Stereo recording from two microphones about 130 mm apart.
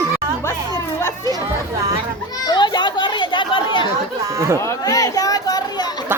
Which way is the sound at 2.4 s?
35° left (ahead or behind).